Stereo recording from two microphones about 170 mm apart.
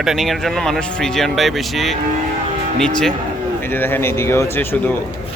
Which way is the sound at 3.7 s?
10° left (ahead or behind).